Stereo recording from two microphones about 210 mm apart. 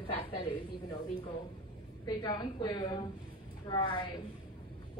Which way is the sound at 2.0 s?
20° left (ahead or behind).